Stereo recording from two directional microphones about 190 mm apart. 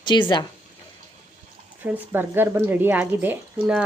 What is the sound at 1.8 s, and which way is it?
Speech, 10° right (ahead or behind).